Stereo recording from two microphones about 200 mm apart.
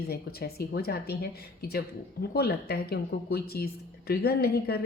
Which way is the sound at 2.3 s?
50° left (ahead or behind).